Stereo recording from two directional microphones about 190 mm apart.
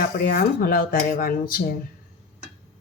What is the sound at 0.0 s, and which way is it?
A woman's voice, 50° left (ahead or behind).